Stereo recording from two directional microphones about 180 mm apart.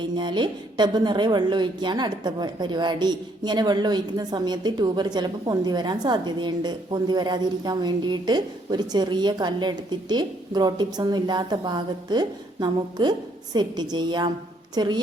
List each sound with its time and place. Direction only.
0.0 s a woman's voice: 25° right (ahead or behind)